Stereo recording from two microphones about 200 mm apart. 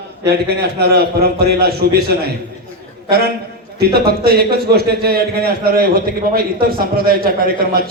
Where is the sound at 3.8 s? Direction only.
50° right (ahead or behind).